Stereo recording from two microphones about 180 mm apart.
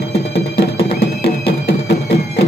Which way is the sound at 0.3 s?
65° left (ahead or behind).